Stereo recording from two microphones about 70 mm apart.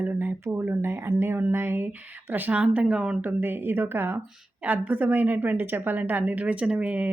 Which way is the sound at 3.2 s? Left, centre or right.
Right.